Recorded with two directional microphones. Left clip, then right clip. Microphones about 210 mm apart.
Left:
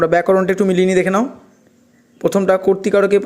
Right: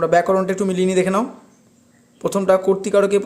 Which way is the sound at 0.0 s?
25° left (ahead or behind).